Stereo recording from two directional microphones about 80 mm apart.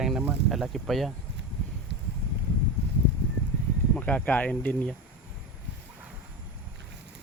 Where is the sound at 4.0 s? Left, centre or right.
Centre.